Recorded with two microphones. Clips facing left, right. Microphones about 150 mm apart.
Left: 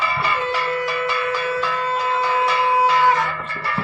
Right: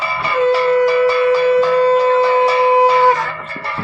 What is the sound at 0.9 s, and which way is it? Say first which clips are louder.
Music: right 11 dB; 35° right (ahead or behind).